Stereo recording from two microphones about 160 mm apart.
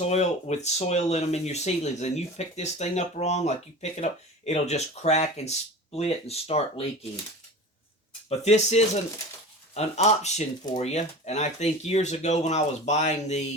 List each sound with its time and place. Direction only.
0.0 s speech: 45° left (ahead or behind)
8.3 s speech: 40° left (ahead or behind)